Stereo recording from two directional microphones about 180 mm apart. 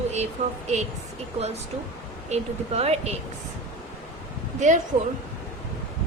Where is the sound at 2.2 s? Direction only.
35° right (ahead or behind).